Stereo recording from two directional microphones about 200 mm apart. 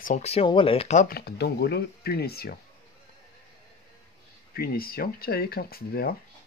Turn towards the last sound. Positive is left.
turn(degrees=50)  # may be behind; listen again after turning